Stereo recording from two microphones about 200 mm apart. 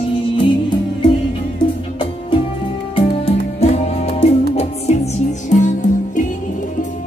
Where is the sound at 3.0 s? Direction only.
30° left (ahead or behind).